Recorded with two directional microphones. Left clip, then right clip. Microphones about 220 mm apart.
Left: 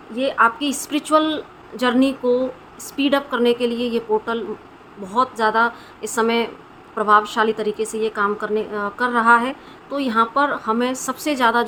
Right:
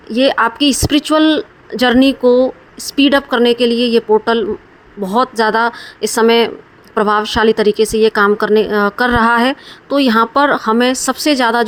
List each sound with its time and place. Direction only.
0.1 s a woman's voice: 40° right (ahead or behind)